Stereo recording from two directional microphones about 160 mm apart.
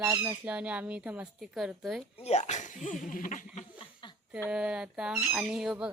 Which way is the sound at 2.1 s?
40° left (ahead or behind).